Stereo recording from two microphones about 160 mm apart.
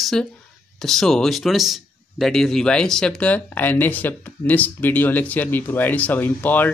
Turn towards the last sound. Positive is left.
turn(degrees=10)  # may be behind; listen again after turning